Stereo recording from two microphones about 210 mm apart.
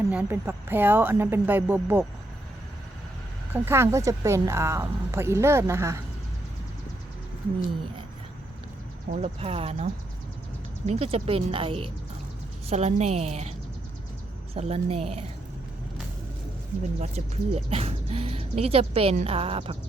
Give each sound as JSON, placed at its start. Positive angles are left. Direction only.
{"t": 0.1, "sound": "speech", "side_deg": -10}
{"t": 3.5, "sound": "speech", "side_deg": -10}
{"t": 9.1, "sound": "a woman's voice", "side_deg": -30}
{"t": 14.5, "sound": "speech", "side_deg": -30}
{"t": 17.0, "sound": "speech", "side_deg": -30}